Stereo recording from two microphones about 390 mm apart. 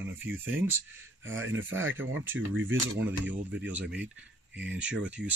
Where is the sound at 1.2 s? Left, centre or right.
Right.